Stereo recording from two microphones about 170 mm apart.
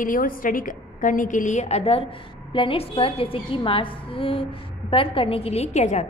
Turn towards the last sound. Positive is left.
turn(degrees=40)  # may be behind; listen again after turning